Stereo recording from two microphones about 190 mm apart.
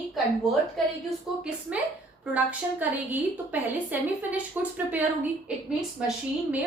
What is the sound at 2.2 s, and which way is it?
A woman's voice, 10° right (ahead or behind).